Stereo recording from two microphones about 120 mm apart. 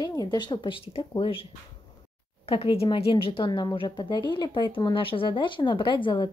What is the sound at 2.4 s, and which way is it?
A woman's voice, 50° left (ahead or behind).